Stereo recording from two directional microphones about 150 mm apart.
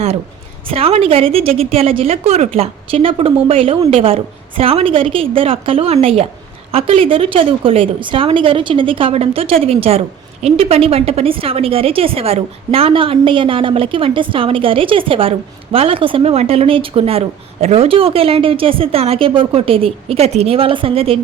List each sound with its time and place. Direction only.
0.7 s a woman's voice: 40° right (ahead or behind)